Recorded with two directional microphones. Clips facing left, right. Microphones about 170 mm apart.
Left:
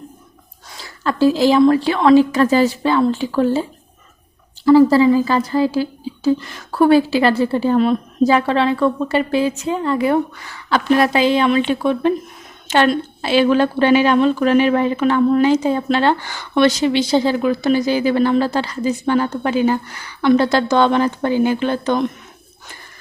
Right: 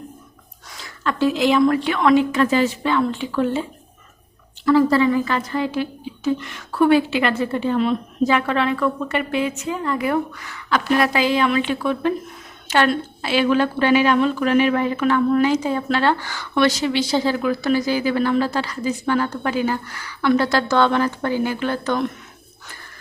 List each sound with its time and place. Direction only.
0.8 s a woman's voice: 35° left (ahead or behind)